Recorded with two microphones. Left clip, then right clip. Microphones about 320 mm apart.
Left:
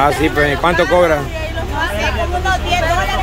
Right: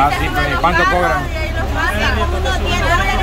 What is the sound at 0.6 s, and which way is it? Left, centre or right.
Speech, centre.